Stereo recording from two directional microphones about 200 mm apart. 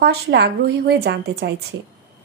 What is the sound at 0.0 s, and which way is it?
Speech, 55° right (ahead or behind).